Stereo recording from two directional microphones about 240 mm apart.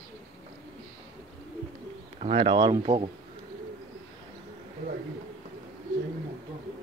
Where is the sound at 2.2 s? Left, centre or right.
Right.